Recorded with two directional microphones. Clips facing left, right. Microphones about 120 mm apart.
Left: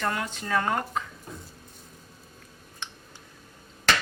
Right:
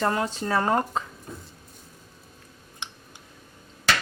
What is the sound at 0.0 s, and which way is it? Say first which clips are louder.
Speech: right 5 dB; 30° right (ahead or behind).